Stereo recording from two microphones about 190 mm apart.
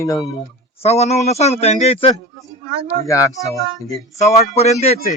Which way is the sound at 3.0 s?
15° left (ahead or behind).